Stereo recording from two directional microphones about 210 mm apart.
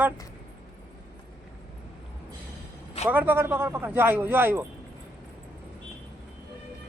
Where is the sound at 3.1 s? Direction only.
10° right (ahead or behind).